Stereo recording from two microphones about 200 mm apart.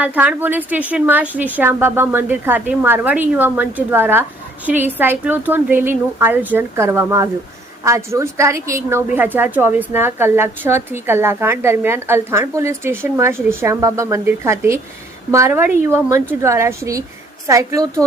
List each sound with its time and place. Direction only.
0.0 s a woman's voice: 5° right (ahead or behind)